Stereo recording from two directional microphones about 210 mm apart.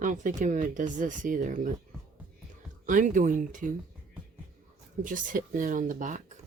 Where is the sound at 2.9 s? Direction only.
40° right (ahead or behind).